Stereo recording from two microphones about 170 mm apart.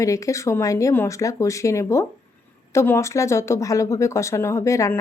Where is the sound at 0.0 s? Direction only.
20° left (ahead or behind).